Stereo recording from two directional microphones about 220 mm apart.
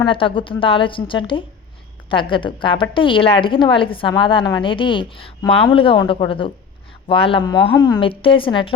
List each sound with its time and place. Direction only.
0.0 s a woman's voice: 25° left (ahead or behind)